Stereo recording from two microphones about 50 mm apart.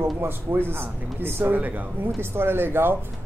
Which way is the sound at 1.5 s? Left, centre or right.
Right.